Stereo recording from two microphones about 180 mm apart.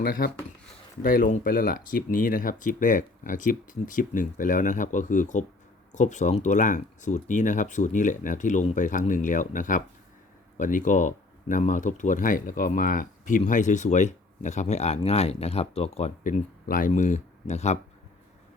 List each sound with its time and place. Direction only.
0.0 s speech: 55° left (ahead or behind)